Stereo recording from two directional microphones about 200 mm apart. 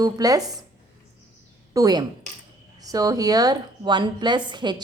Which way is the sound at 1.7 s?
20° right (ahead or behind).